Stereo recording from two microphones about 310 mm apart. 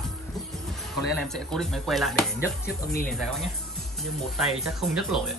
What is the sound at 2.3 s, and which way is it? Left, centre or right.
Speech, left.